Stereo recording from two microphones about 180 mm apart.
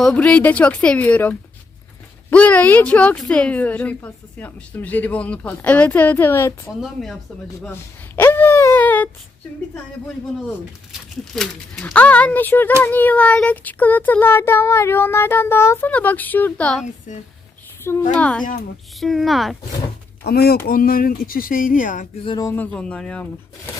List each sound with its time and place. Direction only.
0.0 s a woman's voice: 5° left (ahead or behind)
6.8 s speech: centre (ahead or behind)
7.6 s a sound: 15° left (ahead or behind)
11.3 s a woman's voice: 5° left (ahead or behind)
17.1 s speech: 45° left (ahead or behind)
18.1 s a woman's voice: 5° left (ahead or behind)
20.2 s speech: 60° left (ahead or behind)
22.2 s a sound: 25° left (ahead or behind)
22.4 s a woman's voice: 10° left (ahead or behind)